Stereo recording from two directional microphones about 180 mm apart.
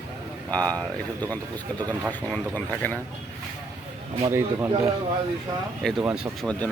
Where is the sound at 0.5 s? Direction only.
10° left (ahead or behind).